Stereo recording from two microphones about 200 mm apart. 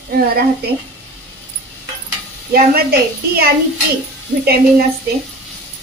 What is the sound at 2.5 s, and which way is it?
Speech, 50° right (ahead or behind).